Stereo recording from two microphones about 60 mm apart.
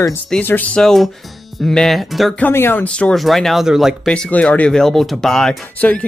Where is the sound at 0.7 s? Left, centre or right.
Centre.